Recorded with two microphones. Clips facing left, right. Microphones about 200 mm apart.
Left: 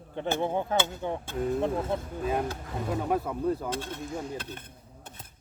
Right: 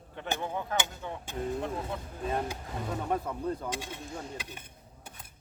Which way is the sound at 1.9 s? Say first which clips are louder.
Left 7 dB; 30° left (ahead or behind).